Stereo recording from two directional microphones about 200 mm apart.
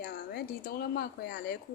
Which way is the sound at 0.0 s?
50° left (ahead or behind).